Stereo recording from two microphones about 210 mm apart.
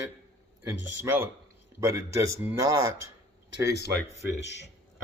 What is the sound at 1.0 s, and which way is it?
Speech, 10° right (ahead or behind).